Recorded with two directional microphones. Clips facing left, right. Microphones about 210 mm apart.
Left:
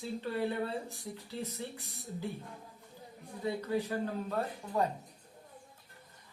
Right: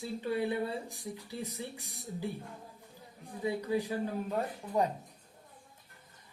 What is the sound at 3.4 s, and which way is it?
A woman's voice, 15° right (ahead or behind).